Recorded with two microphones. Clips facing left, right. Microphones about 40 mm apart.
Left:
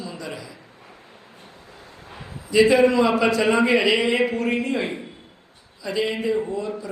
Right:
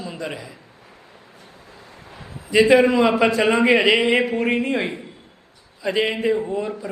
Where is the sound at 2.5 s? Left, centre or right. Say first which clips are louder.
Right 2 dB; right.